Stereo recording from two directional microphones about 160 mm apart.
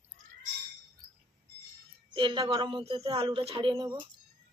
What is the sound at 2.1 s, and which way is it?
A woman's voice, 30° right (ahead or behind).